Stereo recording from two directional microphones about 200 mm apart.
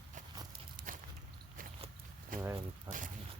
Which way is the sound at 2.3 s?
45° right (ahead or behind).